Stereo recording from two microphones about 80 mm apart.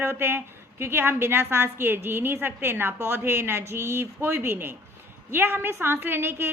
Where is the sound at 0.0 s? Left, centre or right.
Right.